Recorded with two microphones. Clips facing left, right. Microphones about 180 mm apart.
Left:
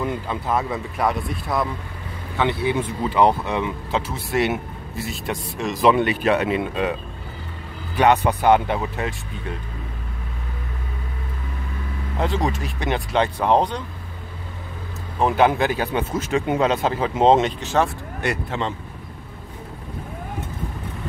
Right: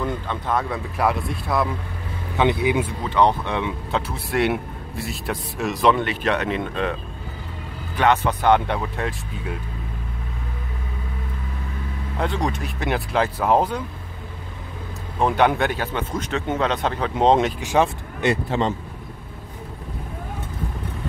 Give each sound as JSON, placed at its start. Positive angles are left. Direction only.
{"t": 0.0, "sound": "speech", "side_deg": 5}
{"t": 2.3, "sound": "speech", "side_deg": -20}
{"t": 3.0, "sound": "speech", "side_deg": 5}
{"t": 8.0, "sound": "speech", "side_deg": 15}
{"t": 12.2, "sound": "speech", "side_deg": 0}
{"t": 15.1, "sound": "speech", "side_deg": 0}
{"t": 17.6, "sound": "speech", "side_deg": -10}
{"t": 17.8, "sound": "speech", "side_deg": -25}